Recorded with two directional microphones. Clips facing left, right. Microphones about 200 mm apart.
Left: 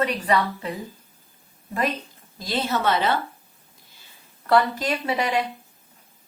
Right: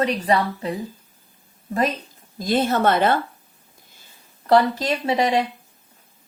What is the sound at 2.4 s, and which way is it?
Speech, 50° right (ahead or behind).